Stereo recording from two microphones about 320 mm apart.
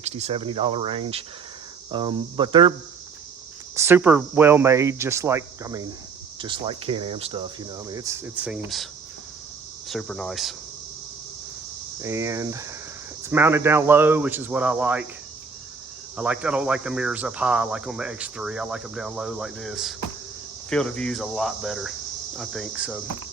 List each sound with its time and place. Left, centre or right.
0.0 s speech: centre
3.8 s speech: centre
9.9 s speech: centre
11.9 s speech: centre
16.1 s speech: centre